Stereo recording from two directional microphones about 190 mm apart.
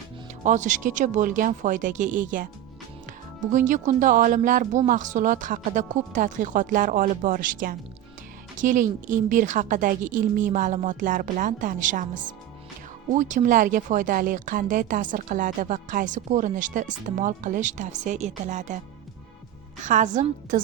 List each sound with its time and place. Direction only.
0.4 s speech: 40° right (ahead or behind)
19.8 s a woman's voice: 40° right (ahead or behind)